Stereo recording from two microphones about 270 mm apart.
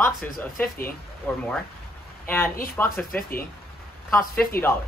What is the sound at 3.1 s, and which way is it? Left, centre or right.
Speech, left.